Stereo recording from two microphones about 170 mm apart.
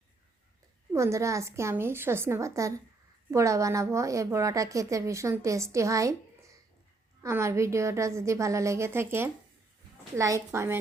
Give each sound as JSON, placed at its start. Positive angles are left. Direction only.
{"t": 0.9, "sound": "a woman's voice", "side_deg": -15}
{"t": 7.2, "sound": "a woman's voice", "side_deg": -15}